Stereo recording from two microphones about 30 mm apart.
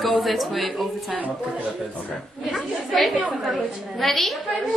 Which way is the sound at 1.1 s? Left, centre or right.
Right.